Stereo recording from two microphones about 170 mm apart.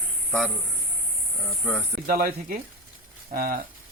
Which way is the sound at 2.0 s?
60° right (ahead or behind).